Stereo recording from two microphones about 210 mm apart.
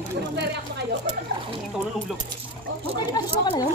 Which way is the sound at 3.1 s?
20° left (ahead or behind).